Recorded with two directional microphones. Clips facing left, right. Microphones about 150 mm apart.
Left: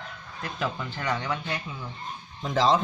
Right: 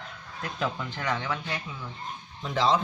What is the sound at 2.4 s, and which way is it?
Speech, 40° left (ahead or behind).